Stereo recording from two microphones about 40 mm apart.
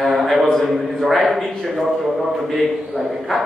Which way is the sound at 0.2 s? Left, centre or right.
Centre.